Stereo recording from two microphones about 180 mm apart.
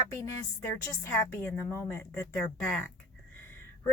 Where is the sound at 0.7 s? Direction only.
15° left (ahead or behind).